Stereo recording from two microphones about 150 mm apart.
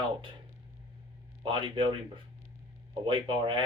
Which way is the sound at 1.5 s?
35° right (ahead or behind).